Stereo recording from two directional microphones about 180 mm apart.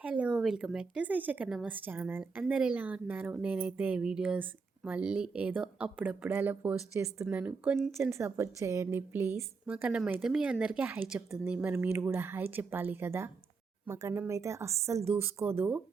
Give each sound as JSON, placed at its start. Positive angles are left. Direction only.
{"t": 0.0, "sound": "speech", "side_deg": -5}